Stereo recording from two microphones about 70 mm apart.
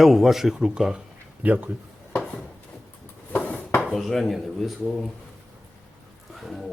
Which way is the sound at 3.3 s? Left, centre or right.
Centre.